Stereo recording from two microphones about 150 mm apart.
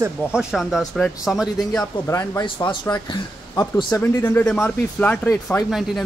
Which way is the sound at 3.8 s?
15° left (ahead or behind).